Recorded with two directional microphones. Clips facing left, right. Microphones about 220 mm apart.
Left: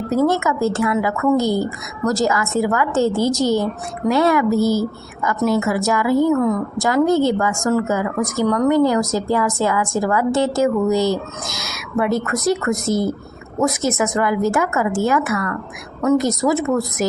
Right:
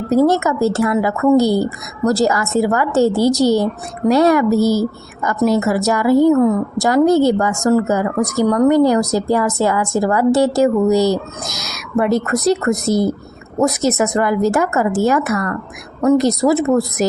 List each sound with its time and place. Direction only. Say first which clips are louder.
0.2 s a woman's voice: right 3 dB; 35° right (ahead or behind)
14.0 s a woman's voice: right 2 dB; 40° right (ahead or behind)